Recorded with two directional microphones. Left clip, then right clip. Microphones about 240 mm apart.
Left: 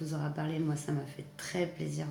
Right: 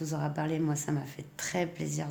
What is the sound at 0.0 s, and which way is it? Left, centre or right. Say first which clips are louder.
Speech: right 4 dB; right.